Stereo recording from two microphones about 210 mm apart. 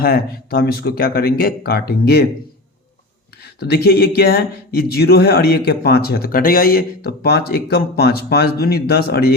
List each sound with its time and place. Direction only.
0.0 s speech: 45° left (ahead or behind)
3.4 s speech: 50° left (ahead or behind)